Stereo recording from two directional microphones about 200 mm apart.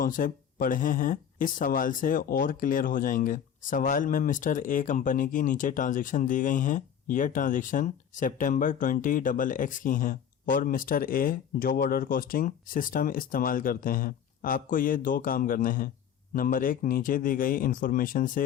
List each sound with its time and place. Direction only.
0.0 s speech: 45° left (ahead or behind)